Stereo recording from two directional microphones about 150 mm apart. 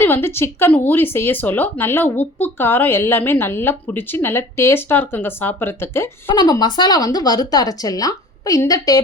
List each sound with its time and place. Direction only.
0.0 s speech: 15° left (ahead or behind)
6.2 s speech: 25° left (ahead or behind)